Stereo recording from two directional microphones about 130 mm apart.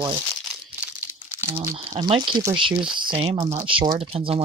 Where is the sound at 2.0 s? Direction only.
45° right (ahead or behind).